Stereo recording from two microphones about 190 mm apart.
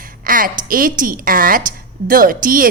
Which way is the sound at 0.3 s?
45° right (ahead or behind).